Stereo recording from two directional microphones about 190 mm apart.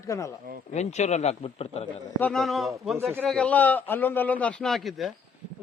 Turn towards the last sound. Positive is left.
turn(degrees=0)  # may be behind; listen again after turning